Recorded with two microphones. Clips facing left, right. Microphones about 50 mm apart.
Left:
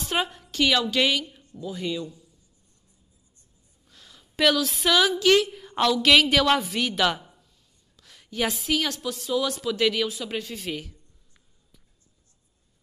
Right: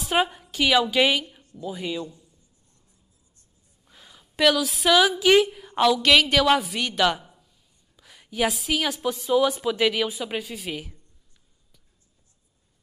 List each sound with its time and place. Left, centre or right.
0.0 s a woman's voice: centre
3.8 s a sound: centre
4.4 s a woman's voice: centre
9.1 s speech: centre